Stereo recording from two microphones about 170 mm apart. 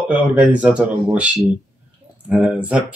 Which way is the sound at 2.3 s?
5° right (ahead or behind).